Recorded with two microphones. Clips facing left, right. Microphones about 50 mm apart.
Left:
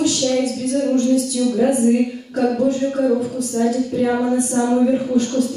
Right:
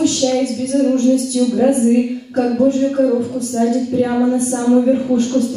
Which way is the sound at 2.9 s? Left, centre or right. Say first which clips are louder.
Right 3 dB; centre.